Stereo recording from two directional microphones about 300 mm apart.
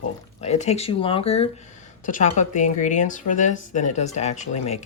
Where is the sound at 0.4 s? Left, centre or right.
Left.